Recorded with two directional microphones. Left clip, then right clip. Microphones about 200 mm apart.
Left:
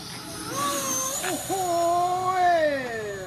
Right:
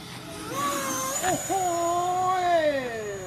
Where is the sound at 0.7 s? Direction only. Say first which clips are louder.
Even; 15° left (ahead or behind).